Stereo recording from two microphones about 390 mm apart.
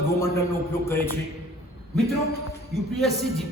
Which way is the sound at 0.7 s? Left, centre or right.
Centre.